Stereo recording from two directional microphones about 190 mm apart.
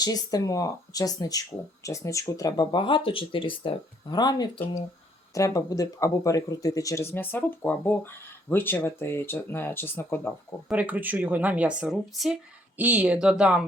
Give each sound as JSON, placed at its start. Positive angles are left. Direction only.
{"t": 0.0, "sound": "speech", "side_deg": 20}
{"t": 10.7, "sound": "speech", "side_deg": -10}